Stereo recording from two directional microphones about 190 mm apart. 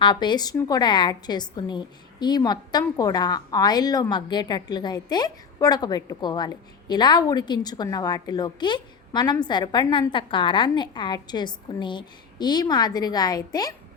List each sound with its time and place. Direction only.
0.0 s a woman's voice: 25° left (ahead or behind)